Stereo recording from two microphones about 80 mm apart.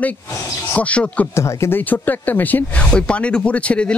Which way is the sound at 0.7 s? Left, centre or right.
Centre.